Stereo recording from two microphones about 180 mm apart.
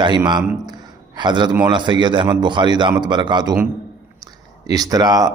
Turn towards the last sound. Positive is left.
turn(degrees=-20)  # may be behind; listen again after turning